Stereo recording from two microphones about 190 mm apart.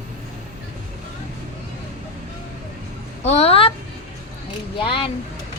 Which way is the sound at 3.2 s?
35° left (ahead or behind).